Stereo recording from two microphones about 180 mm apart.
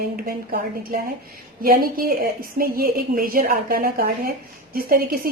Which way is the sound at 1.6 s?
55° right (ahead or behind).